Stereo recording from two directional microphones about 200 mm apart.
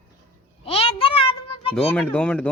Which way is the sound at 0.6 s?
30° left (ahead or behind).